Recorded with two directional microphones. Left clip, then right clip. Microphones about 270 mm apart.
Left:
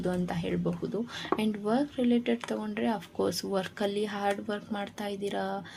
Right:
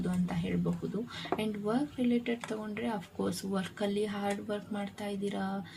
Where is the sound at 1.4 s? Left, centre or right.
Left.